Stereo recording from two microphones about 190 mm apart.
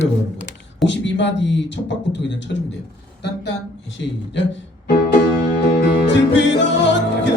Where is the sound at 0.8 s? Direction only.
70° left (ahead or behind).